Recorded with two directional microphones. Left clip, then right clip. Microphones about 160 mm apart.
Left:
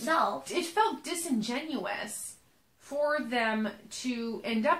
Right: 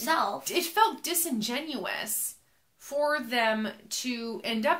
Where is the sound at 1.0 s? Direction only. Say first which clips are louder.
Right 2 dB; 30° right (ahead or behind).